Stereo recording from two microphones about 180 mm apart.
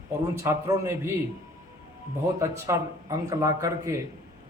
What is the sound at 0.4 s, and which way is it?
Speech, 15° right (ahead or behind).